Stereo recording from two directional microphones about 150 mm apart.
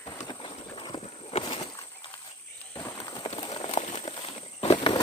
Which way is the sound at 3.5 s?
45° left (ahead or behind).